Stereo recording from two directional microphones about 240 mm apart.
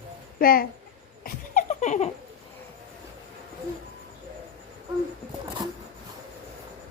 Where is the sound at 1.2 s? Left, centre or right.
Left.